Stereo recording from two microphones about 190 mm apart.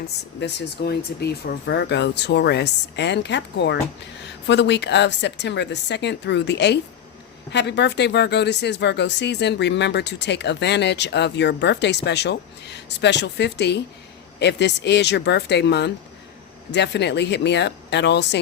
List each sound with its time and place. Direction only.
0.3 s speech: 60° left (ahead or behind)